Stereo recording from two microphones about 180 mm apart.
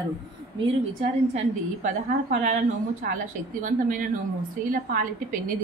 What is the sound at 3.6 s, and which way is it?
Speech, 45° right (ahead or behind).